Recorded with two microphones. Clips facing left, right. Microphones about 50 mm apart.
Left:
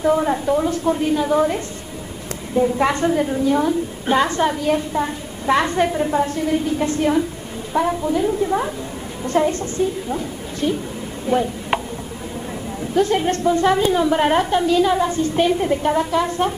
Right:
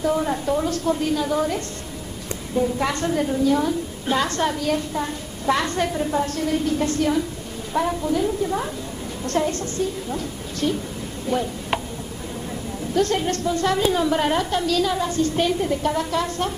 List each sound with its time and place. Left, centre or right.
0.0 s a woman's voice: left
12.9 s a woman's voice: centre
13.9 s a woman's voice: centre
14.2 s a woman's voice: left